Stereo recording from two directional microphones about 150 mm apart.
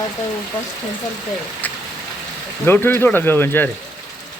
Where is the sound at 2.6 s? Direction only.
15° left (ahead or behind).